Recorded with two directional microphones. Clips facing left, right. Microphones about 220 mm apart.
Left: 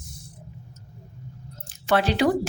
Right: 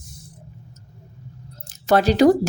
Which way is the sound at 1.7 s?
40° right (ahead or behind).